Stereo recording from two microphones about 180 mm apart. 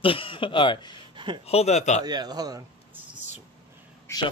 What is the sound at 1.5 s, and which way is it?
Speech, 35° left (ahead or behind).